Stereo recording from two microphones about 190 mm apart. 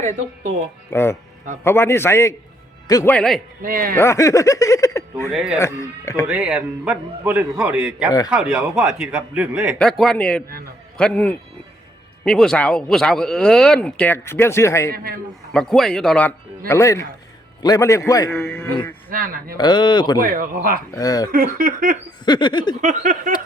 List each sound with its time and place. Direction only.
0.9 s speech: 15° left (ahead or behind)
3.1 s speech: 5° left (ahead or behind)
3.6 s speech: 45° right (ahead or behind)
3.9 s speech: 15° left (ahead or behind)
6.2 s a man's voice: 5° right (ahead or behind); by 14.9 s 15° left (ahead or behind)
14.9 s speech: 50° right (ahead or behind)
15.5 s speech: centre (ahead or behind)
19.1 s speech: 50° right (ahead or behind)
19.5 s speech: 25° left (ahead or behind)
20.1 s speech: 45° right (ahead or behind)
20.9 s speech: 20° left (ahead or behind)
21.2 s speech: 50° right (ahead or behind)
22.3 s speech: 25° left (ahead or behind)
22.8 s speech: 45° right (ahead or behind)